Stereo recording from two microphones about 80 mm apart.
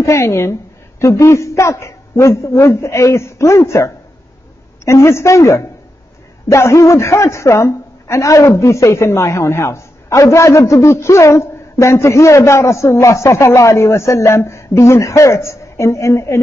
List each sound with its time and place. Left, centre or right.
0.0 s a man's voice: left